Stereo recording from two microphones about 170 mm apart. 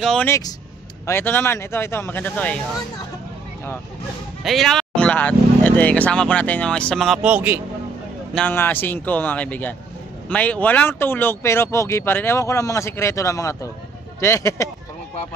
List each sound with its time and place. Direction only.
0.0 s speech: 5° left (ahead or behind)
0.3 s speech: 20° left (ahead or behind)
4.4 s speech: centre (ahead or behind)
8.4 s speech: 10° left (ahead or behind)